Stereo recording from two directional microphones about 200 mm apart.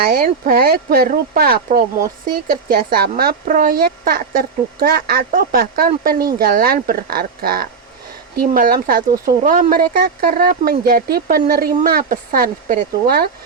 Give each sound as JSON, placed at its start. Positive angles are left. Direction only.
{"t": 0.1, "sound": "speech", "side_deg": -45}